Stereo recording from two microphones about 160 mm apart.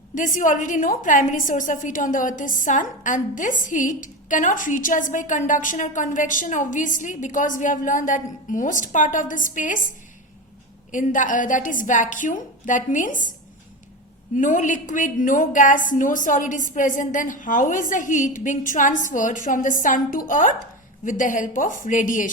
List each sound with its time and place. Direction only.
0.1 s a woman's voice: 55° left (ahead or behind)
10.9 s a woman's voice: 55° left (ahead or behind)
14.3 s a woman's voice: 55° left (ahead or behind)